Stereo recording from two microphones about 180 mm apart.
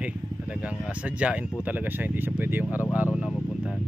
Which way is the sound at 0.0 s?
5° right (ahead or behind).